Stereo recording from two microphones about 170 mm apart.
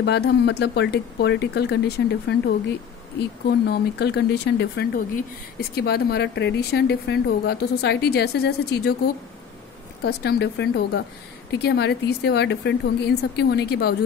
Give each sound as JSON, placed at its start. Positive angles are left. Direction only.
{"t": 0.0, "sound": "speech", "side_deg": 90}